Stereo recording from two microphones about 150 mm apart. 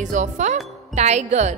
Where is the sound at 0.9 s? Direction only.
50° right (ahead or behind).